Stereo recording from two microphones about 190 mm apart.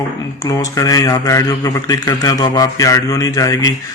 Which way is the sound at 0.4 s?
20° left (ahead or behind).